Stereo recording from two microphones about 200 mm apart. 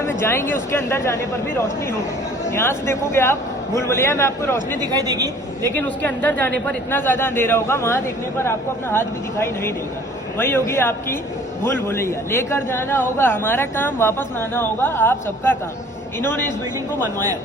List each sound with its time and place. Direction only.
0.1 s a man's voice: 15° left (ahead or behind)
2.5 s a man's voice: 15° left (ahead or behind)
4.8 s a woman's voice: 20° right (ahead or behind)
5.7 s a man's voice: 10° left (ahead or behind)